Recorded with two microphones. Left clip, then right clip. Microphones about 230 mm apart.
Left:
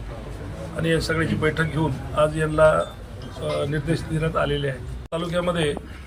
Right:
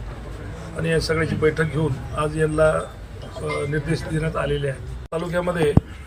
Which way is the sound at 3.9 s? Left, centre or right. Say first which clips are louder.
Left 1 dB; centre.